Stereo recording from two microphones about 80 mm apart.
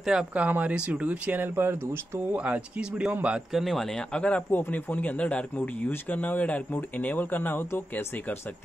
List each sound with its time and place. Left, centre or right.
0.0 s speech: centre
0.3 s speech: centre
2.3 s speech: centre
3.5 s speech: centre
4.1 s speech: centre